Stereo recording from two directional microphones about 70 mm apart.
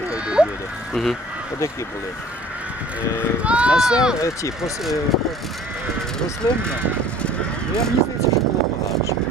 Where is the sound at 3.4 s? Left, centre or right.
Centre.